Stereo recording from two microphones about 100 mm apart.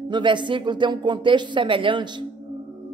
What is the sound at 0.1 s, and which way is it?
A man's voice, 50° right (ahead or behind).